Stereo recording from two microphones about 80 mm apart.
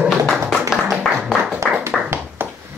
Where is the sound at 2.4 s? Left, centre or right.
Right.